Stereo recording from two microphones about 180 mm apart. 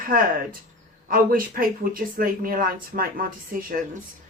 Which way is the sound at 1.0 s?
50° right (ahead or behind).